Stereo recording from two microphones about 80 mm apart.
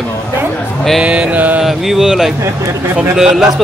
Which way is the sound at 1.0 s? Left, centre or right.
Centre.